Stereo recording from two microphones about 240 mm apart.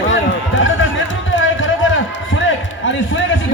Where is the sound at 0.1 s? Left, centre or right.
Left.